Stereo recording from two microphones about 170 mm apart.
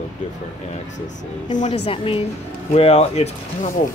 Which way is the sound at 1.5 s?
45° left (ahead or behind).